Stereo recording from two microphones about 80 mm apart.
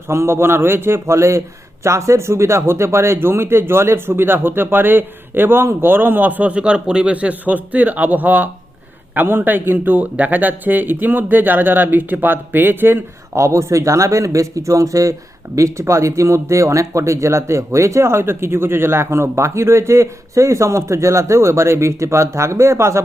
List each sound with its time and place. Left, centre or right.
0.1 s speech: right